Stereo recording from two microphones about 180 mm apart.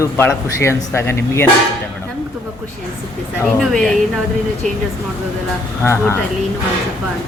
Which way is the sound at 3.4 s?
5° left (ahead or behind).